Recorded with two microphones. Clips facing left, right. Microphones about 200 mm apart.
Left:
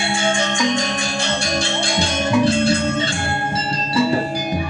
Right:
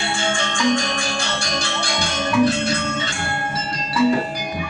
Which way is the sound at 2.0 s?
30° left (ahead or behind).